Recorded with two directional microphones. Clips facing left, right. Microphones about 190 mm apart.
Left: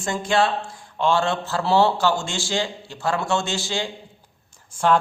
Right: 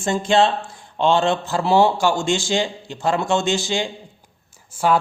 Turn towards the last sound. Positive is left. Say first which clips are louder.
# right 1 dB
turn(degrees=-5)  # may be behind; listen again after turning